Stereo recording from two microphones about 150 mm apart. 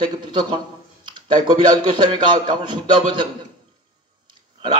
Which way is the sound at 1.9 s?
30° right (ahead or behind).